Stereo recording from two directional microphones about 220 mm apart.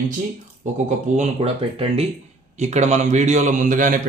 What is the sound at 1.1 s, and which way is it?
Speech, 25° right (ahead or behind).